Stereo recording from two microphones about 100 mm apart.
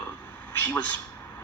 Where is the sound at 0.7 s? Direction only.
15° left (ahead or behind).